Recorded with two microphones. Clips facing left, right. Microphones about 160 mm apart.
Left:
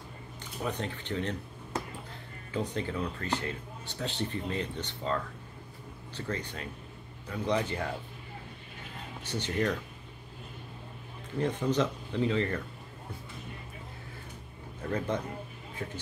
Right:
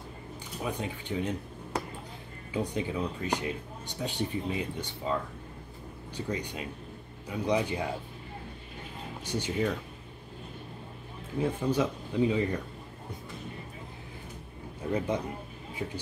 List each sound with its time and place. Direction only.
0.7 s speech: 10° right (ahead or behind)
9.2 s speech: 10° right (ahead or behind)
11.3 s speech: 10° right (ahead or behind)
14.8 s a man's voice: 10° right (ahead or behind)